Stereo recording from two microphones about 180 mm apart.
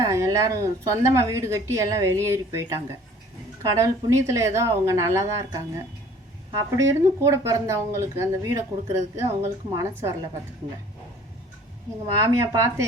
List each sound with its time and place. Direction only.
0.0 s speech: 20° right (ahead or behind)
12.2 s speech: 15° right (ahead or behind)